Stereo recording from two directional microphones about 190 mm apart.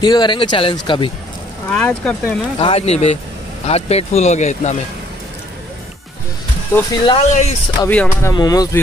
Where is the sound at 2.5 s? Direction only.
30° left (ahead or behind).